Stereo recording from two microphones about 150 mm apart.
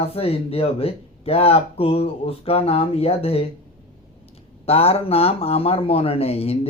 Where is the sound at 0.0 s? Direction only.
40° left (ahead or behind).